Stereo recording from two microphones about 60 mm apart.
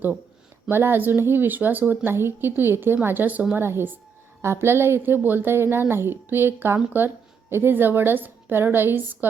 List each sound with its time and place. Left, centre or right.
0.7 s a woman's voice: right
2.0 s a woman's voice: right
3.5 s a woman's voice: right